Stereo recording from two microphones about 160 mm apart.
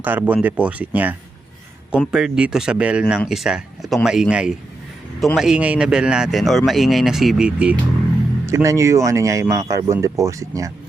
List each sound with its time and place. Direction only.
0.0 s a man's voice: 10° right (ahead or behind)
8.4 s speech: 20° right (ahead or behind)